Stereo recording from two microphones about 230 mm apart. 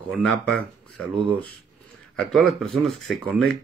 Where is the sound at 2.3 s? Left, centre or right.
Centre.